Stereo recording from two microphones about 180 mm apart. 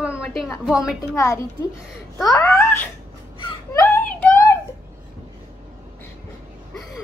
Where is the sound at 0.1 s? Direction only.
15° left (ahead or behind).